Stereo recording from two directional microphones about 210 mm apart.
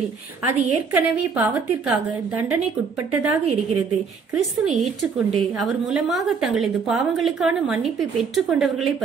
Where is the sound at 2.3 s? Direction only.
10° right (ahead or behind).